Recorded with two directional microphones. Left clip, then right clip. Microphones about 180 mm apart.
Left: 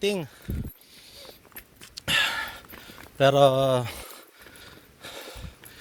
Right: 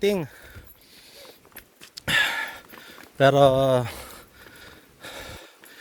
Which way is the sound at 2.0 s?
40° right (ahead or behind).